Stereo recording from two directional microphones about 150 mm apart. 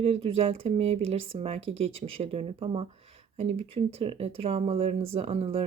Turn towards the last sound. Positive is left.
turn(degrees=-40)  # may be behind; listen again after turning